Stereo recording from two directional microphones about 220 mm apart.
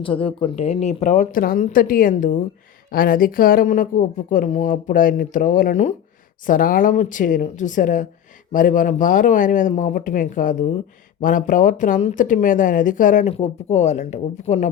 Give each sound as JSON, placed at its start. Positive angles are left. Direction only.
{"t": 0.0, "sound": "speech", "side_deg": 25}